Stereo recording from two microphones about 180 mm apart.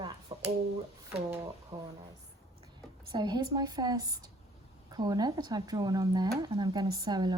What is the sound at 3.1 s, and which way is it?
Speech, 25° right (ahead or behind).